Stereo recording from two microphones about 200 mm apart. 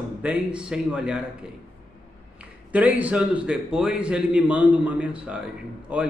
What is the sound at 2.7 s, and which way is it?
A man's voice, 5° right (ahead or behind).